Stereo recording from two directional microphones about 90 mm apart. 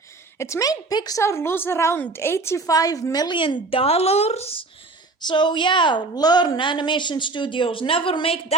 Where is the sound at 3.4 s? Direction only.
80° left.